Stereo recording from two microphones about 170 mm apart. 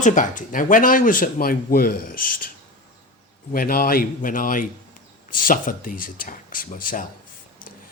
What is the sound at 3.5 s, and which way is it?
Speech, 60° left (ahead or behind).